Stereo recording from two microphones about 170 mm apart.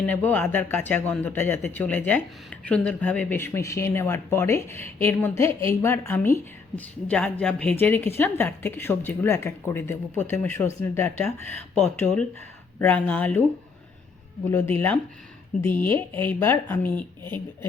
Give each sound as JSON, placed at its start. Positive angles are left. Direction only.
{"t": 0.0, "sound": "speech", "side_deg": 10}
{"t": 14.5, "sound": "speech", "side_deg": 15}